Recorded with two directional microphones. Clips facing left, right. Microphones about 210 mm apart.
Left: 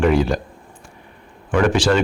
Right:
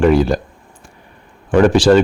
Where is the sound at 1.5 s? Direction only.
35° right (ahead or behind).